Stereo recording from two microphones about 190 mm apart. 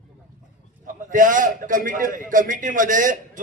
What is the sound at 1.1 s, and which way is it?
A man's voice, 45° right (ahead or behind).